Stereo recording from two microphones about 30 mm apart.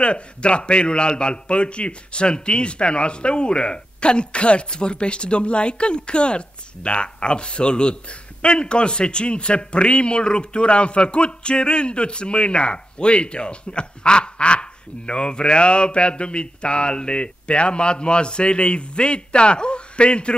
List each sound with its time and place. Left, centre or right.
0.0 s a man's voice: left